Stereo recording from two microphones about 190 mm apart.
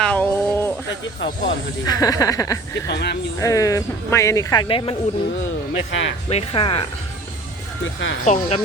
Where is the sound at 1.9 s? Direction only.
20° left (ahead or behind).